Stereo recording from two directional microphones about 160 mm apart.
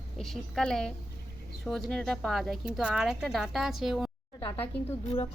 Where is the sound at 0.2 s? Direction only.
Centre (ahead or behind).